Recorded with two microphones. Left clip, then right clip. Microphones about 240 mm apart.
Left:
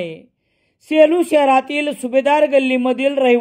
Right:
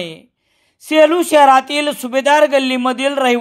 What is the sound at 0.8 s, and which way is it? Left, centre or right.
A man's voice, centre.